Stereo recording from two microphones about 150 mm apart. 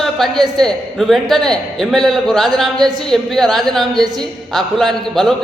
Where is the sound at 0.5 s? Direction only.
Centre (ahead or behind).